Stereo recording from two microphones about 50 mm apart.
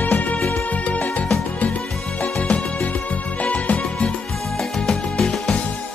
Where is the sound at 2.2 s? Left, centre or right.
Left.